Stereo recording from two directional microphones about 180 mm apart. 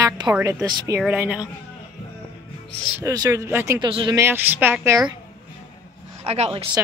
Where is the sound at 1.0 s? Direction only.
5° right (ahead or behind).